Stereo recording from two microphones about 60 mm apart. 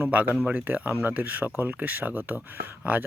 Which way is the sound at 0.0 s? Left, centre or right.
Right.